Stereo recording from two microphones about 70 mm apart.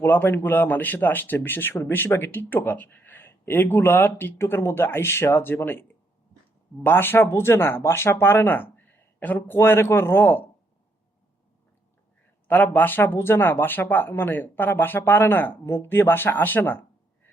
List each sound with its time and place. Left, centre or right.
0.0 s speech: left
6.8 s speech: left
9.6 s speech: left
12.5 s speech: left